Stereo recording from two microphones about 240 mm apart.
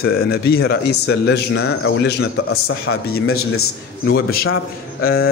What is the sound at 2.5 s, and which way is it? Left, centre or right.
Speech, left.